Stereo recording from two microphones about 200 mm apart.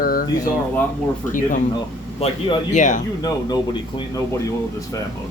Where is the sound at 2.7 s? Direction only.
40° left (ahead or behind).